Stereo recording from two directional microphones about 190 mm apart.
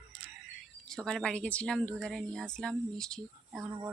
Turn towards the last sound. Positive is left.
turn(degrees=0)  # may be behind; listen again after turning